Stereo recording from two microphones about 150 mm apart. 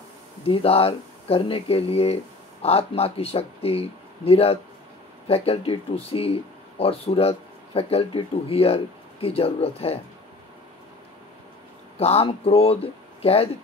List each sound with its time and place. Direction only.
0.5 s speech: 40° left (ahead or behind)
12.0 s speech: 40° left (ahead or behind)